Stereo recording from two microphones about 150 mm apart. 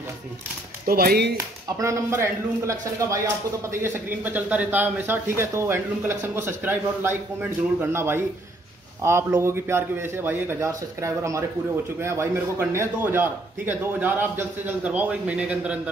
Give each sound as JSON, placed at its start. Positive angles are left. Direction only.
{"t": 0.8, "sound": "speech", "side_deg": -85}
{"t": 1.8, "sound": "a man's voice", "side_deg": -20}